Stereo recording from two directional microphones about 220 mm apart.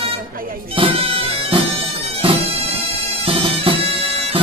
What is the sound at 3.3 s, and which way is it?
Bagpipes, 25° right (ahead or behind).